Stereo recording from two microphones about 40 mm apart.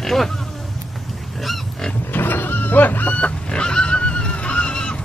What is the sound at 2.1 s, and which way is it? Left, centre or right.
Chicken, left.